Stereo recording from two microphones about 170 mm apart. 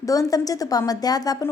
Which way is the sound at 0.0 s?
20° left (ahead or behind).